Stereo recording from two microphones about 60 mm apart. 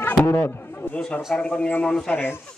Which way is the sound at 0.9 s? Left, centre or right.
Centre.